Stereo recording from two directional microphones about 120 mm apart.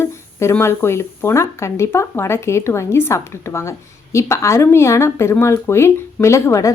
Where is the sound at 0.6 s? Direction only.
20° left (ahead or behind).